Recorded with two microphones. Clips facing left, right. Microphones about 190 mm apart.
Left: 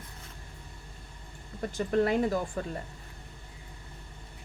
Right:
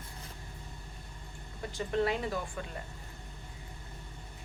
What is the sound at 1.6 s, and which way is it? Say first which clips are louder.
Speech: left 4 dB; 50° left (ahead or behind).